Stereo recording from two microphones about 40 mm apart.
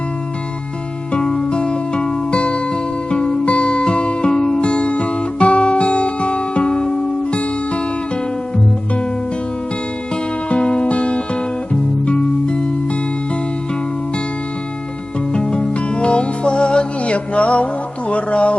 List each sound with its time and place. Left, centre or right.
1.1 s music: centre
10.5 s music: left
15.3 s music: left